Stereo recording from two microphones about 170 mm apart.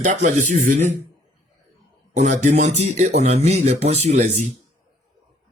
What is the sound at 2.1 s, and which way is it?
Speech, 45° right (ahead or behind).